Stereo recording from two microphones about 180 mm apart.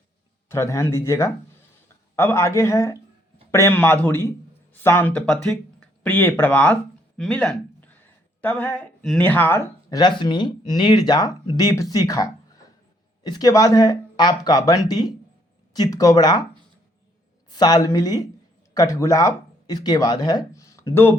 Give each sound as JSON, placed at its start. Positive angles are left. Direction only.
{"t": 0.4, "sound": "a man's voice", "side_deg": 15}
{"t": 17.5, "sound": "speech", "side_deg": 20}